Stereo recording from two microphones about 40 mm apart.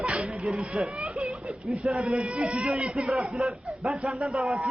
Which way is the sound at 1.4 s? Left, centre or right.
Centre.